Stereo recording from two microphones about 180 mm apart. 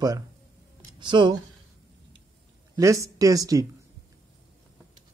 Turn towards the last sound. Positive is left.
turn(degrees=-20)  # may be behind; listen again after turning